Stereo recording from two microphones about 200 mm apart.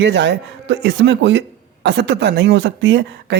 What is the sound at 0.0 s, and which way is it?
A man's voice, 60° right (ahead or behind).